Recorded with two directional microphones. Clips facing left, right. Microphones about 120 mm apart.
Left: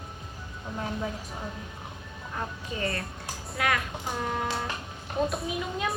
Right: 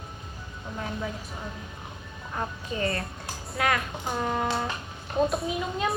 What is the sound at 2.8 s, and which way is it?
Speech, 25° right (ahead or behind).